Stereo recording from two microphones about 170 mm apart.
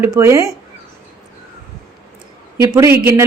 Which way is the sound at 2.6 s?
15° right (ahead or behind).